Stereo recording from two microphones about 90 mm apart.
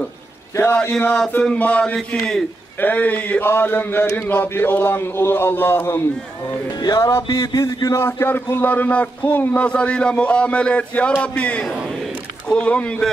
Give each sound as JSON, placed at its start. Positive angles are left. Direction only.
{"t": 1.4, "sound": "a man's voice", "side_deg": 15}
{"t": 6.8, "sound": "music", "side_deg": 45}
{"t": 7.1, "sound": "a sound", "side_deg": 35}
{"t": 7.6, "sound": "a man's voice", "side_deg": 30}